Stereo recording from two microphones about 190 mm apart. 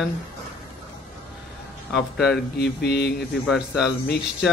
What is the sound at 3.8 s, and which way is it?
Speech, 60° left (ahead or behind).